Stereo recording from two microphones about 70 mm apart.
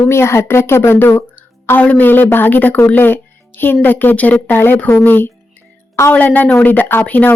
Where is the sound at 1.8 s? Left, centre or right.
Left.